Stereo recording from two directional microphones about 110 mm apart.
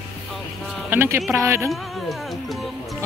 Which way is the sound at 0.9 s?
20° right (ahead or behind).